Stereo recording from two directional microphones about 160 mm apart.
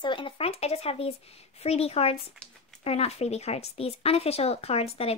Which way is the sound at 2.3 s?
5° left (ahead or behind).